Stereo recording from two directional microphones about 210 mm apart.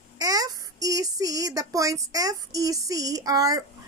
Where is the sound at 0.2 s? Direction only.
15° right (ahead or behind).